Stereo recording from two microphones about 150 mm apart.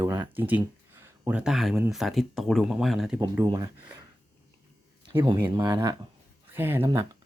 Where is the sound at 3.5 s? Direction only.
20° right (ahead or behind).